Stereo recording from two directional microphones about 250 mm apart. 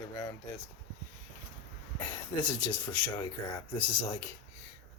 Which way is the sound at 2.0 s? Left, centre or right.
Centre.